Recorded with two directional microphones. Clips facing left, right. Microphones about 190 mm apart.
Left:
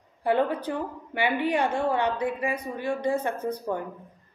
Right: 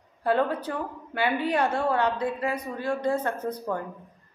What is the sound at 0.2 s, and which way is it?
A woman's voice, 15° left (ahead or behind).